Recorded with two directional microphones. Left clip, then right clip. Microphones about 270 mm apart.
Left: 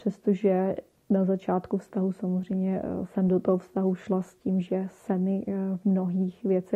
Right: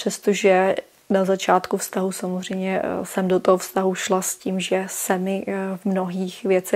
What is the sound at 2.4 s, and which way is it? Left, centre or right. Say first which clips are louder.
Speech: right 10 dB; centre.